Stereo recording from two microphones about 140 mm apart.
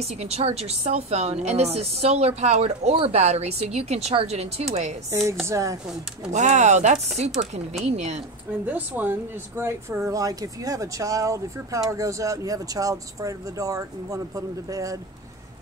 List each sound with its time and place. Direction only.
0.0 s a woman's voice: 50° right (ahead or behind)
5.5 s speech: 25° right (ahead or behind)
6.3 s a woman's voice: 55° right (ahead or behind)
8.6 s speech: 10° right (ahead or behind)